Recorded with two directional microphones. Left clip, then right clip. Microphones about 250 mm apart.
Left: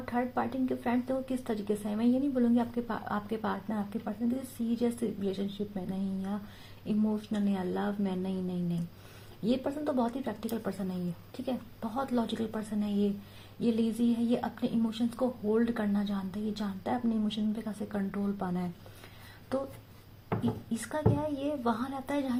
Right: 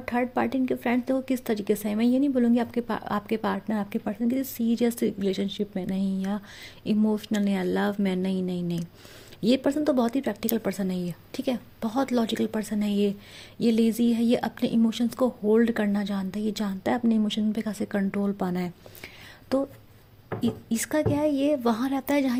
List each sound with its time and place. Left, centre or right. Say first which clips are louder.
0.0 s speech: right 6 dB; right
20.7 s speech: right 7 dB; right